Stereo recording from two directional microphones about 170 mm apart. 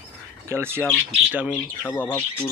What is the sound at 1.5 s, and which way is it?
Speech, 10° left (ahead or behind).